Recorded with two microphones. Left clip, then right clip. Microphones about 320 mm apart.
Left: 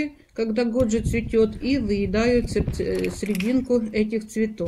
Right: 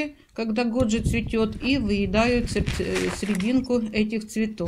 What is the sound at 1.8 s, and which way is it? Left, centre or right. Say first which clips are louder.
Speech: left 1 dB; centre.